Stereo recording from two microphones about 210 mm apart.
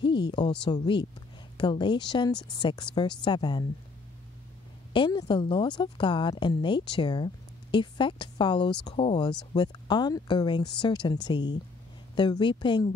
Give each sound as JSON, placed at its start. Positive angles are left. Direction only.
{"t": 0.0, "sound": "a woman's voice", "side_deg": 20}
{"t": 4.9, "sound": "a woman's voice", "side_deg": 25}